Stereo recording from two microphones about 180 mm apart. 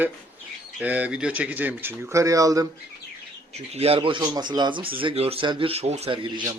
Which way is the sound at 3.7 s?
35° right (ahead or behind).